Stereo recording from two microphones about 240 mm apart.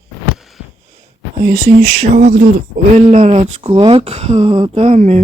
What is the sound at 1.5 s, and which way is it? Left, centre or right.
Speech, right.